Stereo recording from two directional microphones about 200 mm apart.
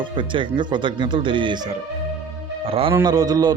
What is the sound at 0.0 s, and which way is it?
A man's voice, 25° right (ahead or behind).